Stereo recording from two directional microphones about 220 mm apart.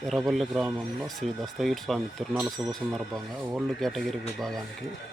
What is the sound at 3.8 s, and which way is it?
Speech, centre (ahead or behind).